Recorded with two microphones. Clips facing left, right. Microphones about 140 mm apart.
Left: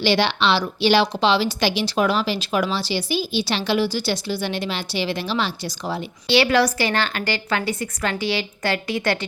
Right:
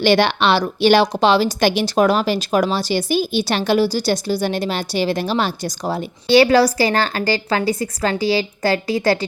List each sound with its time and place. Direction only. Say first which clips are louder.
0.0 s a woman's voice: right 4 dB; 55° right (ahead or behind); by 9.1 s 35° right (ahead or behind)